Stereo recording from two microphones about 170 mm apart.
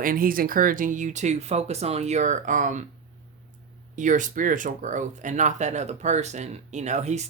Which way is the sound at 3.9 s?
50° right (ahead or behind).